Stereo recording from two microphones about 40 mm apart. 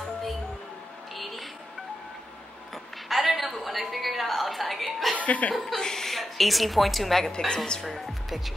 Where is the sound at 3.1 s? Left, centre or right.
Centre.